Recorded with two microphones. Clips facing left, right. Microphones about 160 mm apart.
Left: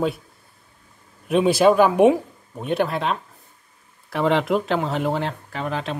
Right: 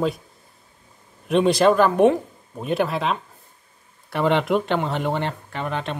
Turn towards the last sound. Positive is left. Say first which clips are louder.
# left 1 dB
turn(degrees=0)  # may be behind; listen again after turning